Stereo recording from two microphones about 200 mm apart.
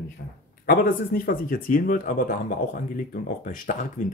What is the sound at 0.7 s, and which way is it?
Speech, 45° left (ahead or behind).